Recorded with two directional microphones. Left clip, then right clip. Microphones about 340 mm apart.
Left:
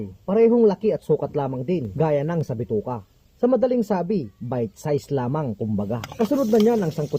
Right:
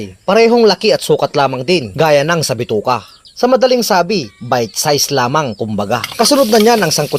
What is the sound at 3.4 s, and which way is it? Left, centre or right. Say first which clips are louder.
Speech: right 9 dB; centre.